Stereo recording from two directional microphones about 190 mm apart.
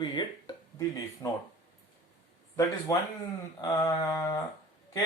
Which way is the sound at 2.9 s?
15° left (ahead or behind).